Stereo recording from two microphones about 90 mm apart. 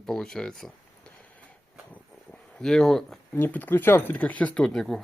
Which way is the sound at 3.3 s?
20° left (ahead or behind).